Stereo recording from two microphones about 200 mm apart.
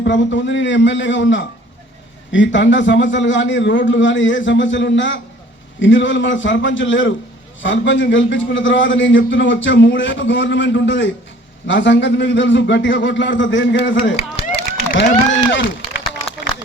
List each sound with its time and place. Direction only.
0.0 s a man's voice: 65° left (ahead or behind)
14.5 s run: 55° left (ahead or behind)